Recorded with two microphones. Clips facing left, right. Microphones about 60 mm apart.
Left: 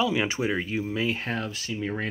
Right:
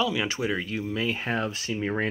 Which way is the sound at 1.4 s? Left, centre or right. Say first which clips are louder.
Right 2 dB; right.